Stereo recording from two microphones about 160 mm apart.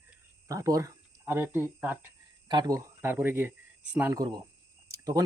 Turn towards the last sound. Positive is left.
turn(degrees=-20)  # may be behind; listen again after turning